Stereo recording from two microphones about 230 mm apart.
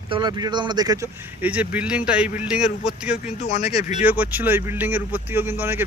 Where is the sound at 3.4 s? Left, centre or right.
Left.